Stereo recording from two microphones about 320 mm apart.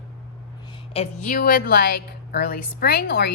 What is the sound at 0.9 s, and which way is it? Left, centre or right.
A woman's voice, left.